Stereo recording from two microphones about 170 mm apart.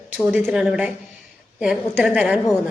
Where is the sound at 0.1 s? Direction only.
10° right (ahead or behind).